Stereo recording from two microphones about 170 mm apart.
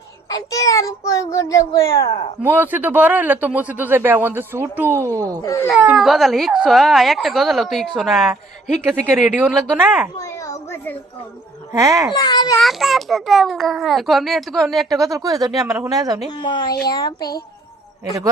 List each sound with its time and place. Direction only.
0.3 s a child's voice: 20° left (ahead or behind)
2.4 s a man's voice: 10° right (ahead or behind)
5.4 s speech: 20° left (ahead or behind)
5.7 s speech: 5° right (ahead or behind)
8.8 s a man's voice: 10° right (ahead or behind)
10.2 s a sound: 20° left (ahead or behind)
11.8 s speech: 20° right (ahead or behind)
12.1 s a child's voice: 25° left (ahead or behind)
12.5 s speech: centre (ahead or behind)
14.9 s speech: 20° right (ahead or behind)
16.3 s a child's voice: 25° left (ahead or behind)
17.2 s a child's voice: 65° left (ahead or behind)